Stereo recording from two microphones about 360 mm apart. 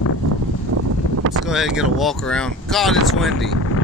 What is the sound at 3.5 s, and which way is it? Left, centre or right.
Vehicle, left.